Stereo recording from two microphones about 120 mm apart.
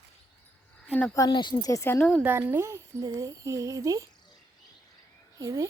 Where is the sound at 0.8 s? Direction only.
10° left (ahead or behind).